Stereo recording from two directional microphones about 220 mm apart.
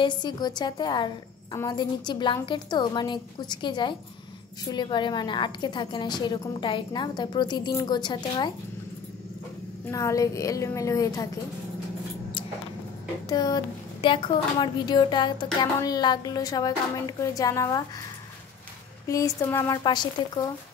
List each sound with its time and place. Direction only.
0.0 s a woman's voice: 20° left (ahead or behind)
9.8 s a woman's voice: 15° left (ahead or behind)
13.3 s a woman's voice: 15° left (ahead or behind)
19.0 s a woman's voice: 15° left (ahead or behind)